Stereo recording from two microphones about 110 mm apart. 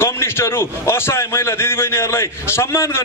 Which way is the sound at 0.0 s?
20° left (ahead or behind).